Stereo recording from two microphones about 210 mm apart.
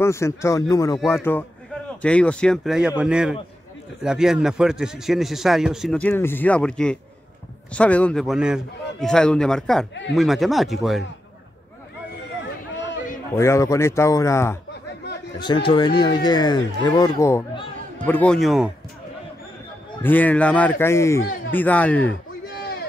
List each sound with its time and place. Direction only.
0.0 s a man's voice: 15° left (ahead or behind)
13.3 s a man's voice: 15° left (ahead or behind)
20.0 s speech: 10° left (ahead or behind)